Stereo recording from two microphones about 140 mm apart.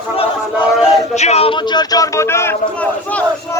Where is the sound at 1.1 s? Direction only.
50° left (ahead or behind).